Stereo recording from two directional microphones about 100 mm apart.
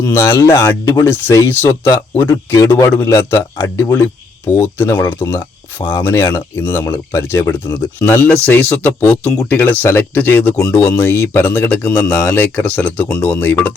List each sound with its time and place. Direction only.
0.0 s speech: 25° left (ahead or behind)
1.0 s speech: 25° left (ahead or behind)
5.4 s speech: 50° left (ahead or behind)
6.1 s speech: 25° left (ahead or behind)